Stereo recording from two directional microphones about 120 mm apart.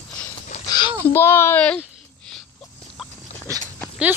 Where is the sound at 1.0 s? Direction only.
20° left (ahead or behind).